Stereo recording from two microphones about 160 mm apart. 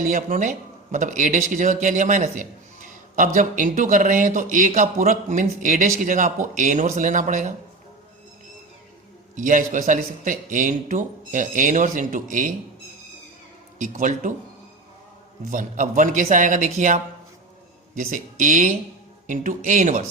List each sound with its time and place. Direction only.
0.0 s a man's voice: 60° right (ahead or behind)
9.3 s speech: 55° right (ahead or behind)
13.7 s a man's voice: 55° right (ahead or behind)
15.4 s a man's voice: 55° right (ahead or behind)